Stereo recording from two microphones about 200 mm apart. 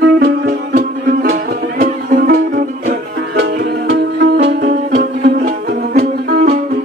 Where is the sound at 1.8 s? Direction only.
45° right (ahead or behind).